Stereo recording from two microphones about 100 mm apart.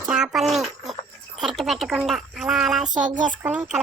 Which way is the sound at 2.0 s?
5° right (ahead or behind).